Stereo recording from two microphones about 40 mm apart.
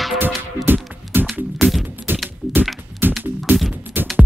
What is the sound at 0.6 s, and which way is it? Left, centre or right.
Music, right.